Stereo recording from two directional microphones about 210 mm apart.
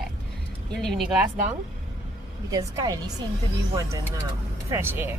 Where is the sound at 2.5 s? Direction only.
15° right (ahead or behind).